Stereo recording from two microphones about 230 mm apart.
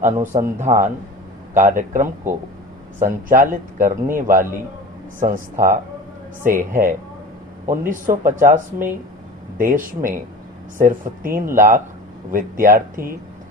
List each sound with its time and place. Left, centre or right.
0.0 s speech: right
2.3 s speech: centre
3.0 s speech: right